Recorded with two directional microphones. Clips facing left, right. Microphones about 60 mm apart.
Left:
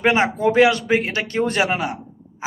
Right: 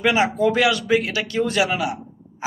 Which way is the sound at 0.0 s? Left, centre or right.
Left.